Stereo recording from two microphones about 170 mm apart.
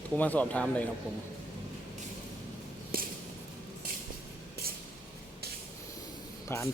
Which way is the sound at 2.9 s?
60° right (ahead or behind).